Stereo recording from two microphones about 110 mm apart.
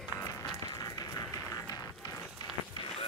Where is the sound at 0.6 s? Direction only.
35° left (ahead or behind).